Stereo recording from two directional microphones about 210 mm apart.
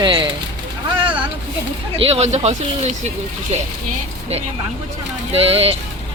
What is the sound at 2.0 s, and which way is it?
Speech, 30° right (ahead or behind).